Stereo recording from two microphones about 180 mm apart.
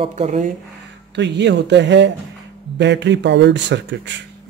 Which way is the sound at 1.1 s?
75° right (ahead or behind).